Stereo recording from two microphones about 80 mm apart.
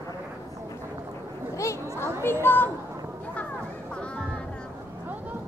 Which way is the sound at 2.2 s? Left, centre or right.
Left.